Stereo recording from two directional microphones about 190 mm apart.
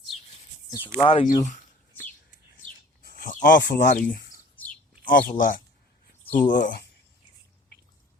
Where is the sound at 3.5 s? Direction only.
65° left (ahead or behind).